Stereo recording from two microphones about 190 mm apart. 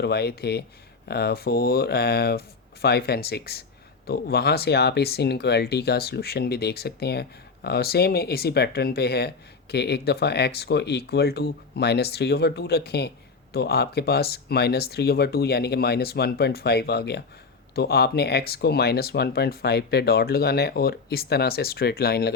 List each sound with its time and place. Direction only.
0.0 s speech: 60° left (ahead or behind)